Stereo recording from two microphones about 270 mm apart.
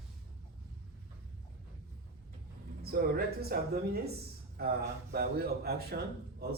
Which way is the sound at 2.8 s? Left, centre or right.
Right.